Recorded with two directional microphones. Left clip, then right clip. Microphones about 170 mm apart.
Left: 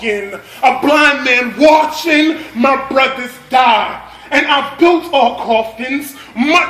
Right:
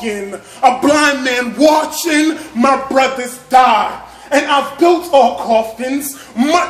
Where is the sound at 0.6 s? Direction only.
35° right (ahead or behind).